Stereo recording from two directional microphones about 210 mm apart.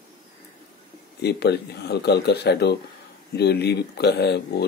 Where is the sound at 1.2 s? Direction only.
50° left (ahead or behind).